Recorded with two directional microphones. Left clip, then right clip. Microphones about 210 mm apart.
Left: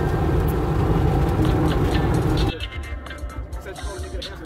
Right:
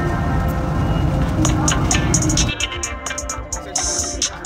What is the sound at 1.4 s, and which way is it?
Music, 45° right (ahead or behind).